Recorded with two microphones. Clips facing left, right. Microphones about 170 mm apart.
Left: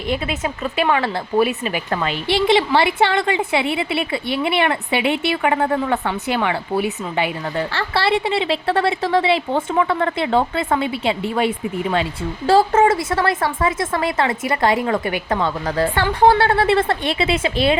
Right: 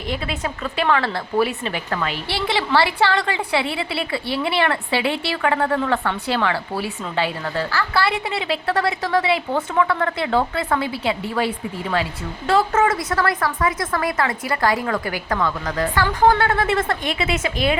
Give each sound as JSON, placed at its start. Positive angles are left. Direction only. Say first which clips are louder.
{"t": 0.1, "sound": "a woman's voice", "louder": "left 3 dB", "side_deg": 20}